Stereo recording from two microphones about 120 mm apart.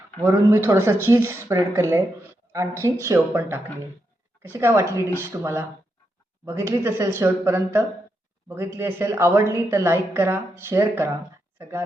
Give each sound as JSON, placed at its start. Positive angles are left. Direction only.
{"t": 0.2, "sound": "a woman's voice", "side_deg": -20}